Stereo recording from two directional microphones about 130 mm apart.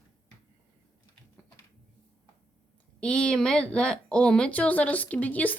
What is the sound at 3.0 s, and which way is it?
Speech, 10° left (ahead or behind).